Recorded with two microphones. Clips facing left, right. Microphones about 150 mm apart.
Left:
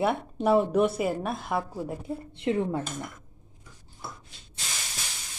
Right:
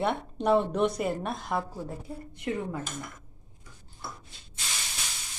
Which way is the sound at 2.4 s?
25° left (ahead or behind).